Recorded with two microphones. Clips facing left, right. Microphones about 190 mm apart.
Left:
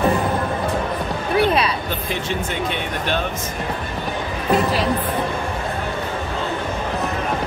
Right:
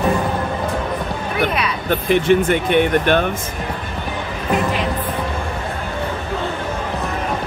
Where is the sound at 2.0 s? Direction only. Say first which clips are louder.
Right 14 dB; 60° right (ahead or behind).